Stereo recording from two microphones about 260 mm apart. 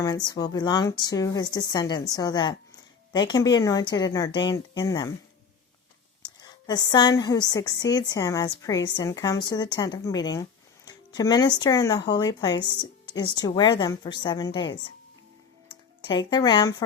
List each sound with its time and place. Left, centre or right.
0.0 s a woman's voice: centre
6.7 s a woman's voice: centre
16.0 s a woman's voice: centre